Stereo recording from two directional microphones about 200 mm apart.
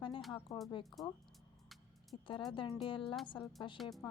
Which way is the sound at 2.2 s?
25° left (ahead or behind).